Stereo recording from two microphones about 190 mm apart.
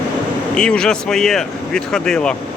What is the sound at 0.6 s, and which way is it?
Speech, 5° left (ahead or behind).